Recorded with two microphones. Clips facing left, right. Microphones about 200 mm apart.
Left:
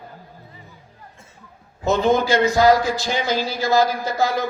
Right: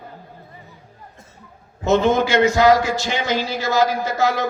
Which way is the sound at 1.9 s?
35° left (ahead or behind).